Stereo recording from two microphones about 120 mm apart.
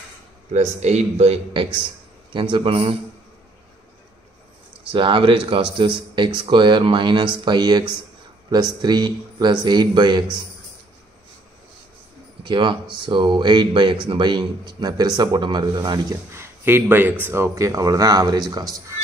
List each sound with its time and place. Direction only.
0.5 s a man's voice: 65° right (ahead or behind)
4.9 s speech: 45° right (ahead or behind)
12.4 s speech: 40° right (ahead or behind)
16.3 s speech: 20° right (ahead or behind)